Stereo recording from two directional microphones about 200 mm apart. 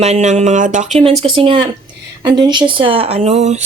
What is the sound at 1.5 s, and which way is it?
Speech, 25° right (ahead or behind).